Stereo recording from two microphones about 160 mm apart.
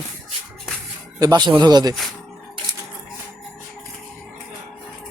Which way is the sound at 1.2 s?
25° right (ahead or behind).